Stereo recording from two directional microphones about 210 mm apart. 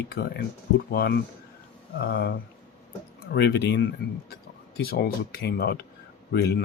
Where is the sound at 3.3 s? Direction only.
50° left (ahead or behind).